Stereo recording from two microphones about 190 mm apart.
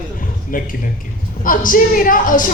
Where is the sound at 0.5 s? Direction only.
45° left (ahead or behind).